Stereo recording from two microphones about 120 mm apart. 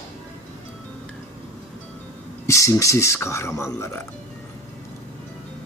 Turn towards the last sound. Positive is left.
turn(degrees=25)  # may be behind; listen again after turning